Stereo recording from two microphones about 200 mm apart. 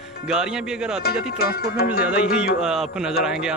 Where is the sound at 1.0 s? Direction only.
50° left (ahead or behind).